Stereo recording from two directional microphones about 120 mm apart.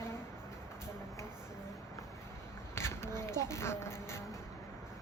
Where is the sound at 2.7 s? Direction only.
20° left (ahead or behind).